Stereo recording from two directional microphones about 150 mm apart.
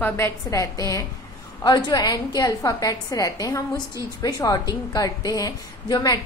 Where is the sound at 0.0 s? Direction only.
15° left (ahead or behind).